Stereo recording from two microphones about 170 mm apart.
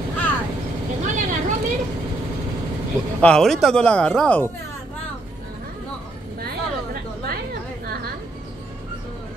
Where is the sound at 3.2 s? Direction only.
5° left (ahead or behind).